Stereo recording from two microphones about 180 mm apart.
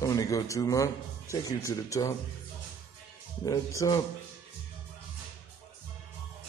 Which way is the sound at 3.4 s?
20° left (ahead or behind).